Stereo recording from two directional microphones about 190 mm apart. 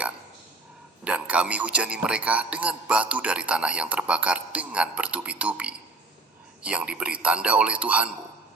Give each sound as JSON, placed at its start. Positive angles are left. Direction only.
{"t": 1.0, "sound": "a man's voice", "side_deg": -5}